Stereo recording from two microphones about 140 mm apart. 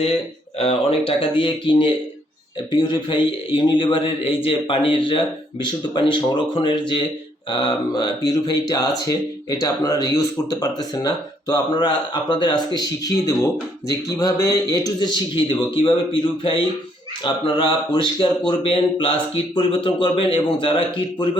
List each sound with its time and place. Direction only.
0.6 s a man's voice: 45° left (ahead or behind)
2.9 s a man's voice: 35° left (ahead or behind)
17.2 s a man's voice: 35° left (ahead or behind)